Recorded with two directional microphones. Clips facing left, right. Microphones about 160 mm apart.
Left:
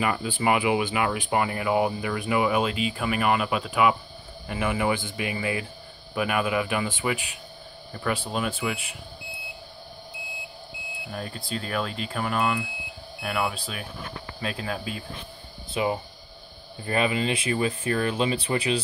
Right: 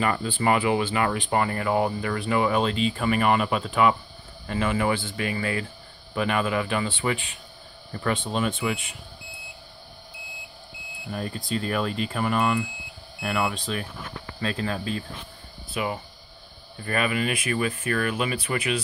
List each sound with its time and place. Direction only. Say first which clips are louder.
0.0 s speech: right 1 dB; 10° left (ahead or behind)
11.1 s speech: right 4 dB; centre (ahead or behind)
15.7 s speech: left 3 dB; 30° left (ahead or behind)